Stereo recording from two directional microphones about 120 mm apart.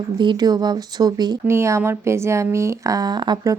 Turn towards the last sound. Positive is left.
turn(degrees=-35)  # may be behind; listen again after turning